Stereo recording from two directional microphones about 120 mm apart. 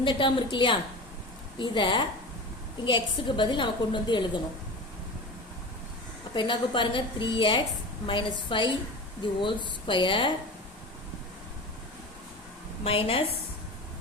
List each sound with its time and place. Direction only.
0.0 s a woman's voice: 45° left (ahead or behind)
6.3 s a woman's voice: 45° left (ahead or behind)
12.8 s a woman's voice: 50° left (ahead or behind)